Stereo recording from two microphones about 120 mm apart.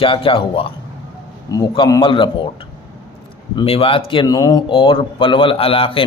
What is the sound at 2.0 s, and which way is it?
Speech, 45° left (ahead or behind).